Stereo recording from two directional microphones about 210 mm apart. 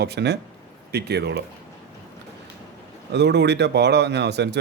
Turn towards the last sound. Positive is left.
turn(degrees=-55)  # may be behind; listen again after turning